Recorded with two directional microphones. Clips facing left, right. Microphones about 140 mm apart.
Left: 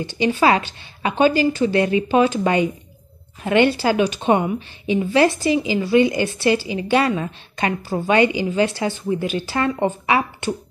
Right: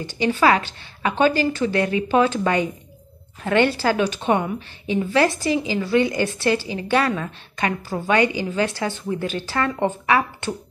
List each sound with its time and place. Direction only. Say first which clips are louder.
0.0 s a woman's voice: left 1 dB; 20° left (ahead or behind)